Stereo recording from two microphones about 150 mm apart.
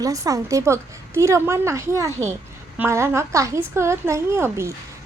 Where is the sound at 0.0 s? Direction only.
20° right (ahead or behind).